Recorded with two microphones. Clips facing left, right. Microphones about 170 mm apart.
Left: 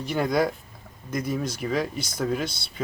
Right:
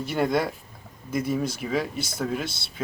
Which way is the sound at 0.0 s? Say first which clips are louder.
Left 1 dB; centre (ahead or behind).